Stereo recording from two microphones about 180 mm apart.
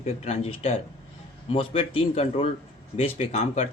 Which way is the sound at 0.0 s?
35° left (ahead or behind).